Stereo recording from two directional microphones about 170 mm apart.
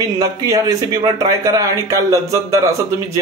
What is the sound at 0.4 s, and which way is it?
Speech, 20° right (ahead or behind).